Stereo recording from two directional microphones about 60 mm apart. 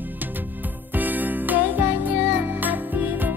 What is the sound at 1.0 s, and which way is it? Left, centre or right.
Music, right.